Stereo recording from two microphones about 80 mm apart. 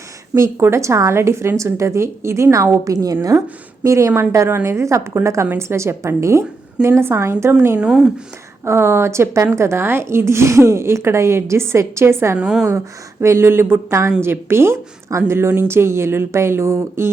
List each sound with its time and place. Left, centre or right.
0.3 s a woman's voice: right
7.8 s speech: centre
8.6 s a woman's voice: right
12.4 s speech: centre
13.2 s a woman's voice: right